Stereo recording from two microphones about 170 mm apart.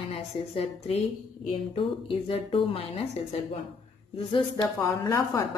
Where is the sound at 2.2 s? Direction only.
35° left (ahead or behind).